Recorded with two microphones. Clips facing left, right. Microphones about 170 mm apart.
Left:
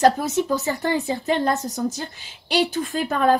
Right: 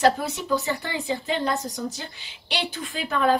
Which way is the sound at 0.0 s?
45° left (ahead or behind).